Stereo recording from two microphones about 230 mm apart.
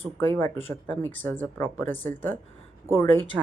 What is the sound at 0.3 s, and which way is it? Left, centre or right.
Speech, centre.